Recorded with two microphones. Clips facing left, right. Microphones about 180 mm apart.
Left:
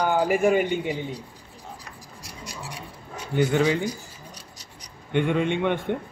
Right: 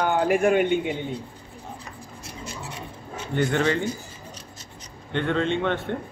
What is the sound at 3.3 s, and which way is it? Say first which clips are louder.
Speech: left 1 dB; 10° left (ahead or behind).